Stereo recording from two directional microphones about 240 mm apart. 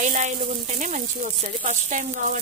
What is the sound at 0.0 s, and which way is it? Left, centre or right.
Speech, right.